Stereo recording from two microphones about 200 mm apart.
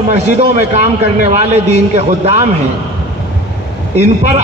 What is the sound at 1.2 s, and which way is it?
A man's voice, 35° right (ahead or behind).